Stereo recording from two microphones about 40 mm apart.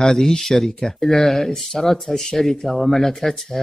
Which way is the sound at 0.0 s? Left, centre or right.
Centre.